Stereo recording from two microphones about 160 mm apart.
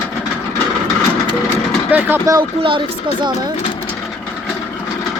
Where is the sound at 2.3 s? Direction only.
30° right (ahead or behind).